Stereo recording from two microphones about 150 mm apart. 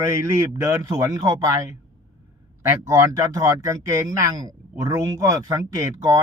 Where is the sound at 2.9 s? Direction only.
20° right (ahead or behind).